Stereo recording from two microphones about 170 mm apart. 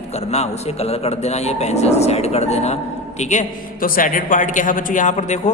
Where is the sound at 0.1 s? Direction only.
40° left (ahead or behind).